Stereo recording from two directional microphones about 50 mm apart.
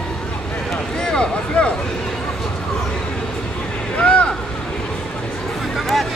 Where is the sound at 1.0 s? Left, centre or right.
Centre.